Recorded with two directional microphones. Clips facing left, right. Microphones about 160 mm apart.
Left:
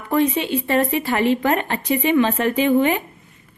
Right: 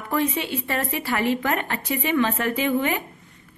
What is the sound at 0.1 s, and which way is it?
A woman's voice, 20° left (ahead or behind).